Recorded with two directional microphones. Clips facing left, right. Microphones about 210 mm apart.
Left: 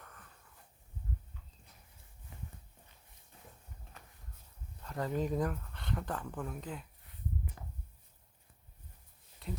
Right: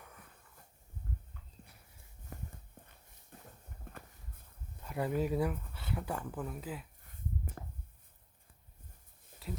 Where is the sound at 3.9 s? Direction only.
55° right (ahead or behind).